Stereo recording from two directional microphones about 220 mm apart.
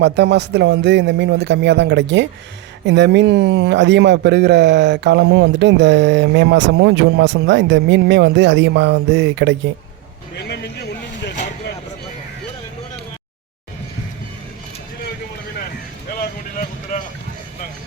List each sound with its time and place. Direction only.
0.0 s a man's voice: 50° right (ahead or behind)
10.5 s a sound: 50° left (ahead or behind)
16.2 s vehicle: 35° left (ahead or behind)